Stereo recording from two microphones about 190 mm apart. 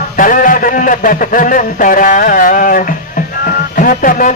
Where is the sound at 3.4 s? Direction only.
45° left (ahead or behind).